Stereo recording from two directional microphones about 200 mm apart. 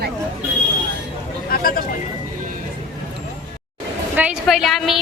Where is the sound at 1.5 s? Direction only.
45° left (ahead or behind).